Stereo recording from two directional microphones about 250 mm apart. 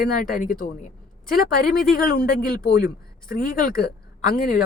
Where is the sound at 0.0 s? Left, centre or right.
Left.